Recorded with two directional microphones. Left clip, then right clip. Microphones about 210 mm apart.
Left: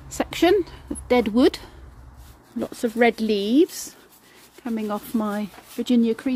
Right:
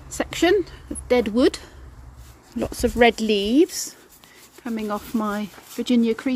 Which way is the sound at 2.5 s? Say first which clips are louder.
Right 3 dB; centre (ahead or behind).